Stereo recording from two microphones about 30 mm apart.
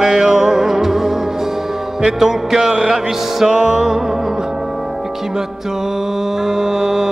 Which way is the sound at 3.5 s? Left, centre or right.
Right.